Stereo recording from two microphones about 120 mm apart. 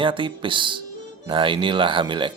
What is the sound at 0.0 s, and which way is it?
Speech, 45° right (ahead or behind).